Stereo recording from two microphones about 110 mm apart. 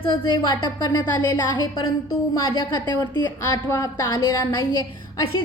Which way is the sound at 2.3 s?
40° left (ahead or behind).